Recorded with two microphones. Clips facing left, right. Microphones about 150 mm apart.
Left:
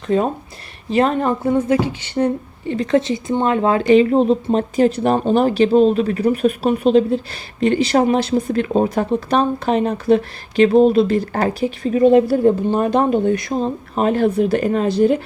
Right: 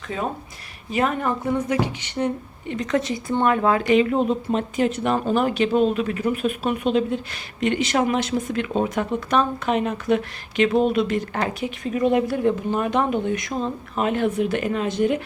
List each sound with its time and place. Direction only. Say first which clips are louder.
0.9 s speech: left 6 dB; 30° left (ahead or behind)